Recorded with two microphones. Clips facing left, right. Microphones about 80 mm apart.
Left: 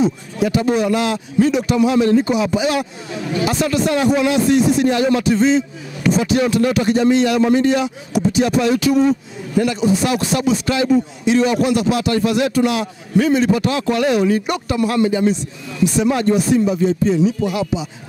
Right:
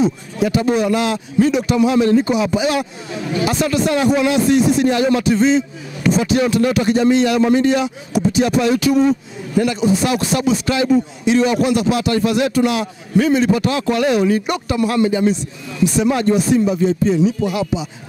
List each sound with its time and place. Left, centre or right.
0.0 s a man's voice: centre